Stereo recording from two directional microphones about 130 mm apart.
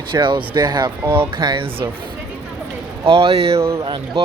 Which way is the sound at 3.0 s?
45° right (ahead or behind).